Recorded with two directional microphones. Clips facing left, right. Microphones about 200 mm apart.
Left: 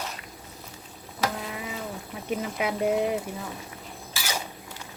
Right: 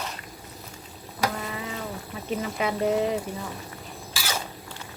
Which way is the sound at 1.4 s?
5° left (ahead or behind).